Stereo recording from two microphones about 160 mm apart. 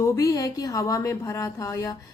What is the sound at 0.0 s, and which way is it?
A woman's voice, 20° left (ahead or behind).